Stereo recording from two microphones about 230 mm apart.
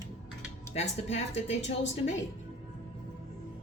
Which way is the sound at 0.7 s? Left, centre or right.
Left.